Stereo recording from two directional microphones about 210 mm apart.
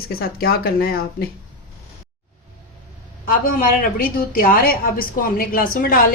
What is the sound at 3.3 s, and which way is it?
A woman's voice, 40° left (ahead or behind).